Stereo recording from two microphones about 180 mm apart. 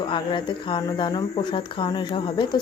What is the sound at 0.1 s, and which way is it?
Speech, 25° left (ahead or behind).